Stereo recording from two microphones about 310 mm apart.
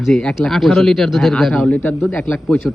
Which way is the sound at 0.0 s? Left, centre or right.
Centre.